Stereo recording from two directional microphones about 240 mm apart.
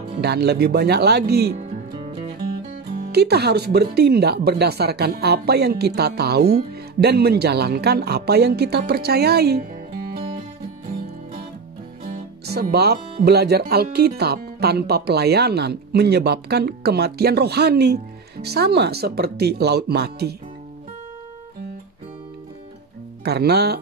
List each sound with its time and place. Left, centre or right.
0.2 s speech: right
2.9 s speech: right
9.6 s music: right
12.4 s speech: right
23.2 s speech: right